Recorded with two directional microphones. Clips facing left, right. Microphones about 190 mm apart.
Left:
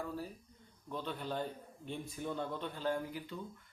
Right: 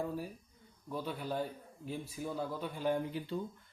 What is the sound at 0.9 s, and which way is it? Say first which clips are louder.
A man's voice: right 2 dB; 10° right (ahead or behind).